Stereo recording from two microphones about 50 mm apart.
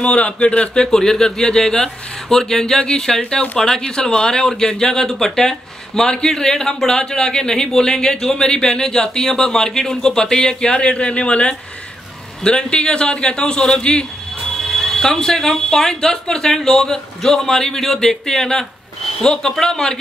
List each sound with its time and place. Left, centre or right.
0.0 s a man's voice: left
0.8 s a man's voice: centre
14.5 s speech: centre